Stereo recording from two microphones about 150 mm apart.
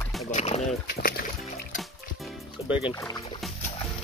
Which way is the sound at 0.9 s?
85° left.